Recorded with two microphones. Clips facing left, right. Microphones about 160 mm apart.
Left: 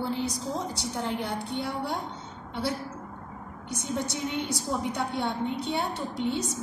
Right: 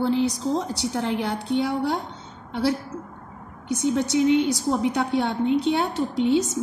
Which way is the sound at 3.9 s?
80° right.